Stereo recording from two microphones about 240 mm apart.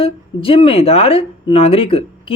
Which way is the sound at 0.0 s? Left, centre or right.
Left.